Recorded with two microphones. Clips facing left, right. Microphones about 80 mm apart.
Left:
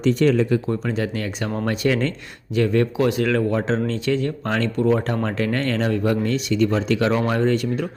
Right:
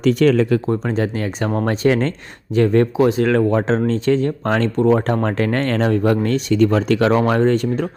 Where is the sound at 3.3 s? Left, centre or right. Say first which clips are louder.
Right 4 dB; right.